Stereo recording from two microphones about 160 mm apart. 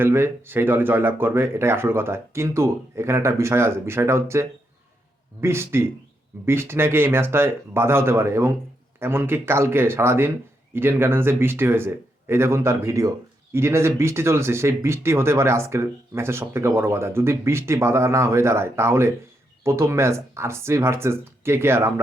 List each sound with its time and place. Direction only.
0.0 s speech: 15° right (ahead or behind)